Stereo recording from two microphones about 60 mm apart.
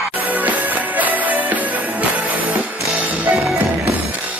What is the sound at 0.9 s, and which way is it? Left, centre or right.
Music, right.